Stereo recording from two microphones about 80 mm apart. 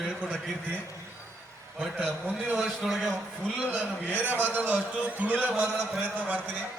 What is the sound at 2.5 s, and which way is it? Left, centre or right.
Speech, centre.